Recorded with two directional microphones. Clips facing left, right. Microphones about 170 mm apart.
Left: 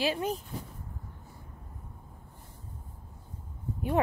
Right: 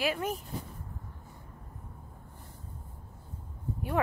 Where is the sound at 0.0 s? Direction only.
25° left (ahead or behind).